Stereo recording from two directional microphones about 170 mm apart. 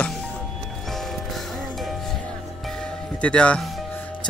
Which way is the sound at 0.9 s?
Centre (ahead or behind).